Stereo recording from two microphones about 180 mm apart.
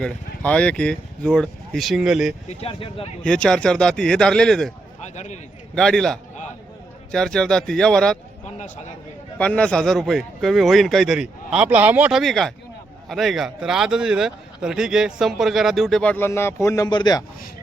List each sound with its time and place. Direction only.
0.0 s speech: 5° left (ahead or behind)
2.5 s speech: 35° left (ahead or behind)
3.2 s speech: 5° left (ahead or behind)
5.1 s speech: 40° left (ahead or behind)
5.7 s speech: 5° left (ahead or behind)
8.5 s speech: 45° left (ahead or behind)
9.4 s speech: 5° left (ahead or behind); by 17.2 s 25° left (ahead or behind)